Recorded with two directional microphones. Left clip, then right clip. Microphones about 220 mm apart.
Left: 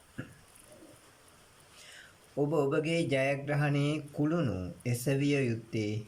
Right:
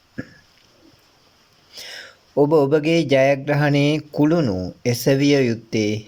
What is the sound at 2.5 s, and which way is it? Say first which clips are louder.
Speech: right 12 dB; 35° right (ahead or behind).